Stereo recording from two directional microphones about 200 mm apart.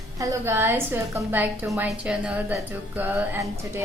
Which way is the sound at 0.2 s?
10° right (ahead or behind).